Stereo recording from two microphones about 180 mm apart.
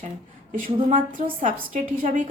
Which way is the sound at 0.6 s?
45° right (ahead or behind).